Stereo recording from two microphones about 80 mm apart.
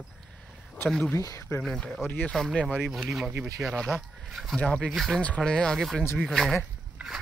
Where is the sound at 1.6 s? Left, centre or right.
Centre.